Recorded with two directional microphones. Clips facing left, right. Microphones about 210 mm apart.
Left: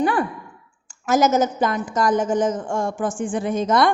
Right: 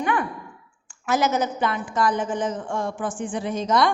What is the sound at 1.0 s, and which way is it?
A woman's voice, 45° left (ahead or behind).